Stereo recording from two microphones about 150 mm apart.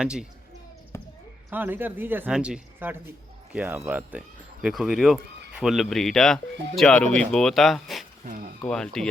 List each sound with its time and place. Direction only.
0.0 s speech: 5° right (ahead or behind)
0.9 s basketball bounce: 20° left (ahead or behind)
1.5 s speech: 15° right (ahead or behind)
8.2 s speech: 60° right (ahead or behind)
8.6 s speech: 5° left (ahead or behind)